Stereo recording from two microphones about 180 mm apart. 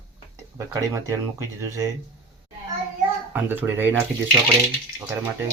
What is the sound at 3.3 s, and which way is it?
Speech, 10° right (ahead or behind).